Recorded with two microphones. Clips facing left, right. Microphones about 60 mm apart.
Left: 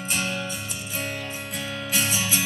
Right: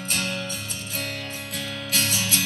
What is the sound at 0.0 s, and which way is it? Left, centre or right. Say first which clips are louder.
Music: left 1 dB; centre.